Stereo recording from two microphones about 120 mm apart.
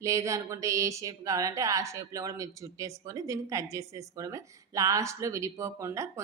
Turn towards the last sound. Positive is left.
turn(degrees=-25)  # may be behind; listen again after turning